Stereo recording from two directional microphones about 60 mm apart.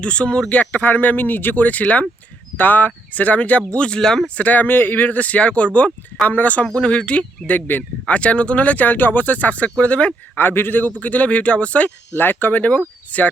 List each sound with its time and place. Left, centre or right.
0.0 s speech: centre
4.4 s speech: left
10.3 s speech: left
12.1 s speech: left
13.1 s a sound: left